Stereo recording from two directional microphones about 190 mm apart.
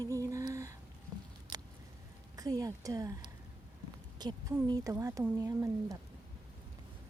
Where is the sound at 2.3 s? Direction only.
20° right (ahead or behind).